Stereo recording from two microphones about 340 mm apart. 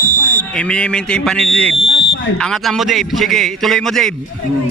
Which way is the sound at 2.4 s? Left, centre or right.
Centre.